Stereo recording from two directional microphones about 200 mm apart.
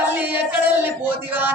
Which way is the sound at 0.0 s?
10° right (ahead or behind).